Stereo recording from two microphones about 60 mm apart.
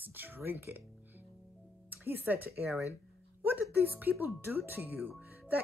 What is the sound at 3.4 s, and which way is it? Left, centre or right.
Speech, right.